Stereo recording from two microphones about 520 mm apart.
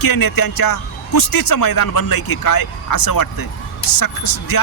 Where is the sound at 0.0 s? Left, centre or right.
Left.